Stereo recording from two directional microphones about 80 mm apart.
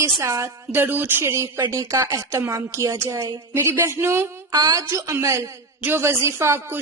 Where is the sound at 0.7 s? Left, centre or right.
Right.